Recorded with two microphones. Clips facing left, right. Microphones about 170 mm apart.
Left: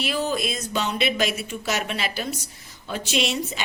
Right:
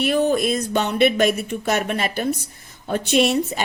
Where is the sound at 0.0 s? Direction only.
60° right (ahead or behind).